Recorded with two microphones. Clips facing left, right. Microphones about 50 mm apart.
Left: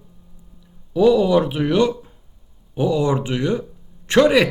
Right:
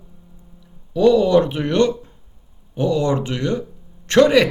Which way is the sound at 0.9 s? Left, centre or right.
Centre.